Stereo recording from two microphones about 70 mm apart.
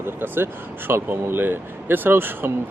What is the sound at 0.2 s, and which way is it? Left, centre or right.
Speech, right.